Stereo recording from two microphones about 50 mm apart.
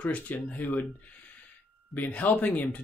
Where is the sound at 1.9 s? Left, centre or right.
Left.